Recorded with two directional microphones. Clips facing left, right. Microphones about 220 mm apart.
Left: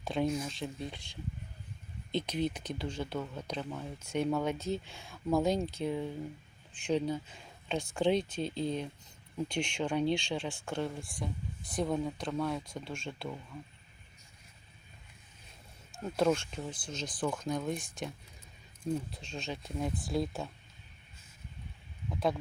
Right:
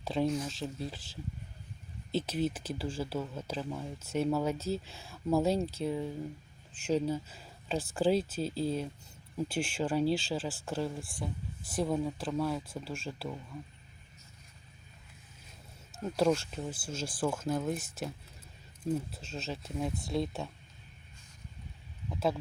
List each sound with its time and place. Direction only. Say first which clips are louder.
0.0 s speech: right 1 dB; centre (ahead or behind)
16.0 s speech: right 1 dB; 5° right (ahead or behind)